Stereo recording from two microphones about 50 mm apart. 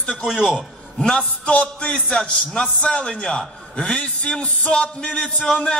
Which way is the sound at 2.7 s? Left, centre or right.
Left.